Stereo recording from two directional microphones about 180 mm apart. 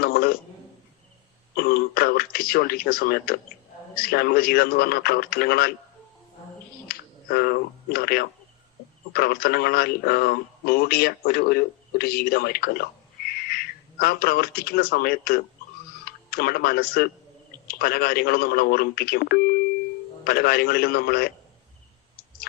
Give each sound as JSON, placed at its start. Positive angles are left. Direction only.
{"t": 0.0, "sound": "a sound", "side_deg": 55}
{"t": 1.5, "sound": "speech", "side_deg": 55}
{"t": 6.8, "sound": "speech", "side_deg": 55}